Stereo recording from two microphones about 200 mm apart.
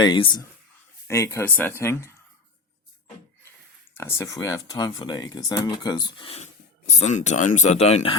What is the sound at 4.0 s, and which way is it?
Speech, 10° left (ahead or behind).